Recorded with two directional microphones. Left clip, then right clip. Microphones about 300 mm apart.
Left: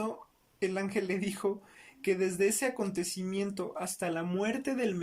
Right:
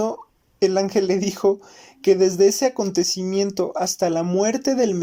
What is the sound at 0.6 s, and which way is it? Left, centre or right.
Speech, right.